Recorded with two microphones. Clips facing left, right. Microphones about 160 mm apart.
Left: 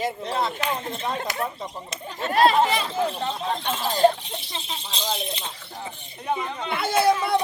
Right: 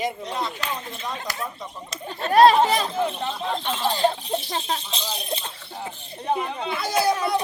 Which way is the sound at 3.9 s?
45° left (ahead or behind).